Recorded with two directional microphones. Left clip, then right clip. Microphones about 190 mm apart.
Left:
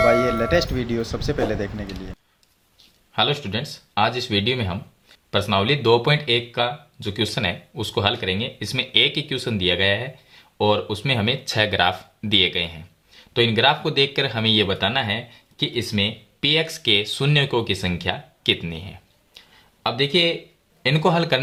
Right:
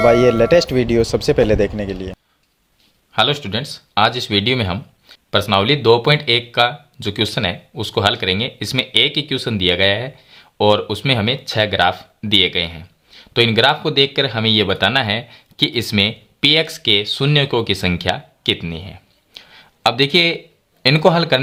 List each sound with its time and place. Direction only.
0.3 s speech: 40° right (ahead or behind)
3.1 s speech: 30° right (ahead or behind)
19.3 s a sound: 35° right (ahead or behind)
20.8 s speech: 30° right (ahead or behind)